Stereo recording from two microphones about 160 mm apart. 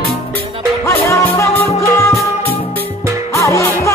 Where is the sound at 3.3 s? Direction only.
20° left (ahead or behind).